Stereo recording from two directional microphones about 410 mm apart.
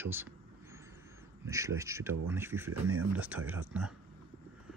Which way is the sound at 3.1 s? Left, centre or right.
Centre.